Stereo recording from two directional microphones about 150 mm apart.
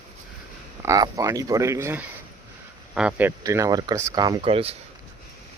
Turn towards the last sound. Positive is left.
turn(degrees=-40)  # may be behind; listen again after turning